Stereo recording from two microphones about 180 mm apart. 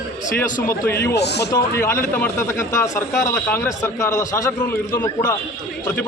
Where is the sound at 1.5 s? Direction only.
15° left (ahead or behind).